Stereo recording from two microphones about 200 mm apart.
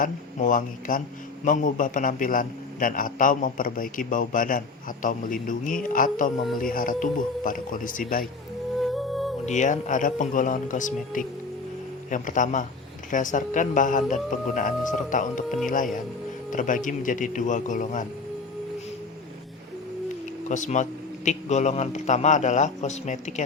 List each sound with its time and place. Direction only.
0.0 s a man's voice: 40° left (ahead or behind)
8.8 s music: centre (ahead or behind)
9.5 s speech: 35° left (ahead or behind)
16.5 s speech: 40° left (ahead or behind)
20.5 s speech: 35° left (ahead or behind)